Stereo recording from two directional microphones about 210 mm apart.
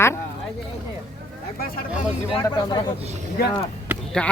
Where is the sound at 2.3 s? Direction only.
20° left (ahead or behind).